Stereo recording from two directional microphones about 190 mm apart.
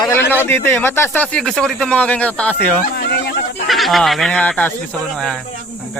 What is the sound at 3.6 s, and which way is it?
Speech, centre (ahead or behind).